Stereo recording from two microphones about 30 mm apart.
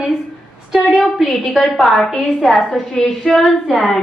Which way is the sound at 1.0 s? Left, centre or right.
Centre.